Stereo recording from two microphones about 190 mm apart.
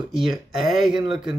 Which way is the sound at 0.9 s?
25° right (ahead or behind).